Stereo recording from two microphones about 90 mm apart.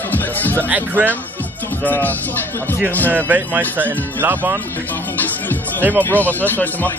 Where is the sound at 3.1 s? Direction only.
20° right (ahead or behind).